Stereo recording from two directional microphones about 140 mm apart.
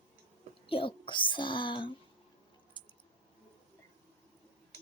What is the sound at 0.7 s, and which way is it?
Speech, 40° left (ahead or behind).